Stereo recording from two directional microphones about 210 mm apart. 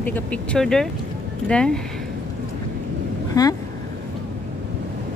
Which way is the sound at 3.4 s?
15° left (ahead or behind).